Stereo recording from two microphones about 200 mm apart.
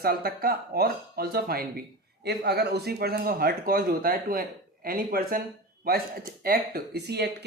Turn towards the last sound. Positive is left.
turn(degrees=-55)  # may be behind; listen again after turning